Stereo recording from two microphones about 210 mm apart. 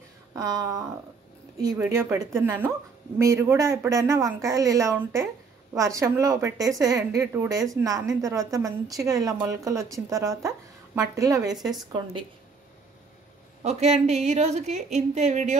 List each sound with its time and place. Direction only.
0.3 s a woman's voice: 15° right (ahead or behind)
13.6 s a woman's voice: 30° right (ahead or behind)